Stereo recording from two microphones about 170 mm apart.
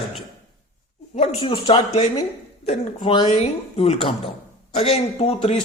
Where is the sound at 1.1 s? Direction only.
35° left (ahead or behind).